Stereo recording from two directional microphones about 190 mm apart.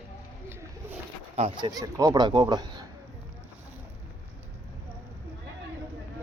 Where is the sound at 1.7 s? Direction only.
20° right (ahead or behind).